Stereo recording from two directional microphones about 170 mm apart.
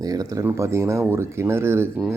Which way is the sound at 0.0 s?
20° right (ahead or behind).